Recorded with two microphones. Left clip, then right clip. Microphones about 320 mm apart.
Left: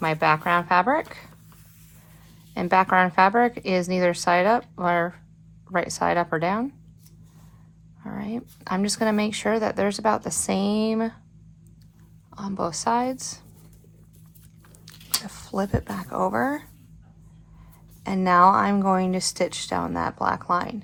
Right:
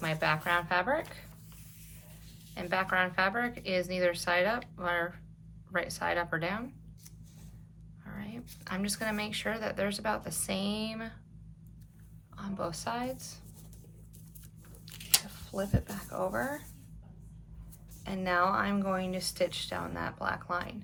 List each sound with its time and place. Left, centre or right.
0.0 s speech: centre
2.6 s speech: centre
8.0 s speech: centre
12.3 s speech: centre
15.3 s speech: left
18.0 s speech: centre